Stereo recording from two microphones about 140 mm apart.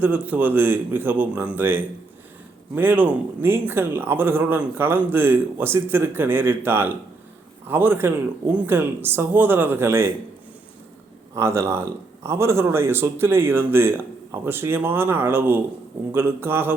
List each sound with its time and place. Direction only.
0.0 s a man's voice: 10° right (ahead or behind)
11.3 s a man's voice: 20° right (ahead or behind)